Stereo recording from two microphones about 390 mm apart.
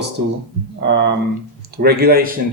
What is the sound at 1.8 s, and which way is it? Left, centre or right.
Speech, right.